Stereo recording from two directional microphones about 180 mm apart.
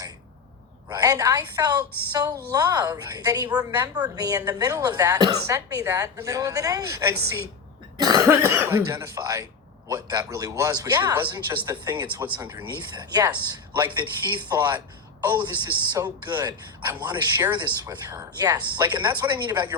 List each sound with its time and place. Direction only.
0.9 s a woman's voice: 20° right (ahead or behind)